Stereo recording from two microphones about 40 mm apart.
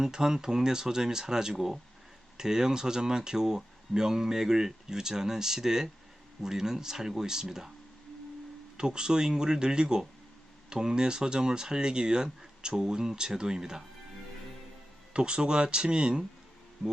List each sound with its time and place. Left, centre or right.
0.0 s speech: centre
8.8 s speech: centre
15.1 s speech: right